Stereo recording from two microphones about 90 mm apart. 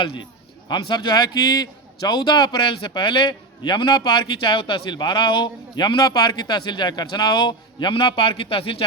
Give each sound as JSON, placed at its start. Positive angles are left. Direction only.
{"t": 0.0, "sound": "a man's voice", "side_deg": 65}
{"t": 0.7, "sound": "a man's voice", "side_deg": 55}